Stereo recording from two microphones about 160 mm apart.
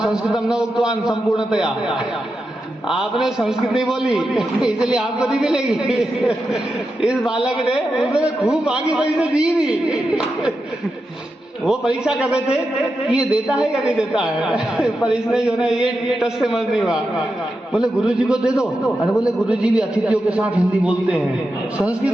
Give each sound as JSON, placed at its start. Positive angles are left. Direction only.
{"t": 0.0, "sound": "a man's voice", "side_deg": -5}
{"t": 11.6, "sound": "a man's voice", "side_deg": -5}